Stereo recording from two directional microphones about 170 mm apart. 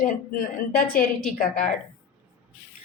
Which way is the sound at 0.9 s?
55° left (ahead or behind).